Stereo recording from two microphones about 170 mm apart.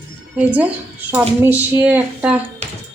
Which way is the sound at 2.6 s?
40° right (ahead or behind).